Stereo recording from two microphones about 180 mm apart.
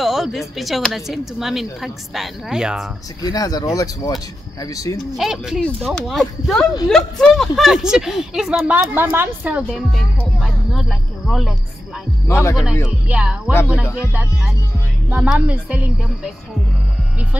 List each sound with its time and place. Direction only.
0.0 s speech: centre (ahead or behind)
3.3 s speech: 20° left (ahead or behind)
5.1 s speech: centre (ahead or behind)
12.3 s speech: 15° left (ahead or behind)
12.8 s speech: 5° right (ahead or behind)
15.0 s speech: 10° right (ahead or behind)